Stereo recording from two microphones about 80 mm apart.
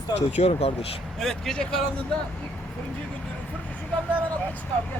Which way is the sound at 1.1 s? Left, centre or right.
Centre.